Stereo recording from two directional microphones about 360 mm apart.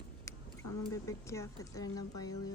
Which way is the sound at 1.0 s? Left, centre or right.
Centre.